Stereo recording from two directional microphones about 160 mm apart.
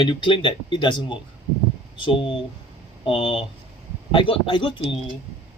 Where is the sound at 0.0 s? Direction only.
30° left (ahead or behind).